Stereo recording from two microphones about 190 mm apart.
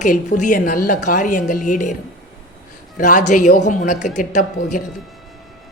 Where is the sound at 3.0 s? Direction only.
40° left (ahead or behind).